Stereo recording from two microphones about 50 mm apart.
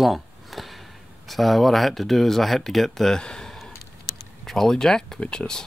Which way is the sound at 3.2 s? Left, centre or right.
Centre.